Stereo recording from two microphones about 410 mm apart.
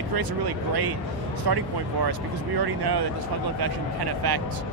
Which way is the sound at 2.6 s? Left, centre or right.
Right.